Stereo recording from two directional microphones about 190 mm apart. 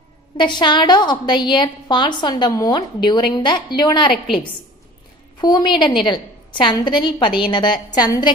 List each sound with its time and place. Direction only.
0.4 s a woman's voice: 25° left (ahead or behind)
5.4 s a woman's voice: 25° left (ahead or behind)